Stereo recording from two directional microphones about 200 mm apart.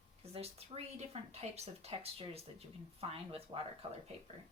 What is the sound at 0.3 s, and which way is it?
Speech, 30° right (ahead or behind).